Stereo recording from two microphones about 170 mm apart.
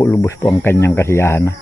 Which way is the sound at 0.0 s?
15° left (ahead or behind).